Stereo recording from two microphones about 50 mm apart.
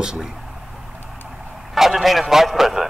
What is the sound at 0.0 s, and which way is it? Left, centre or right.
Speech, centre.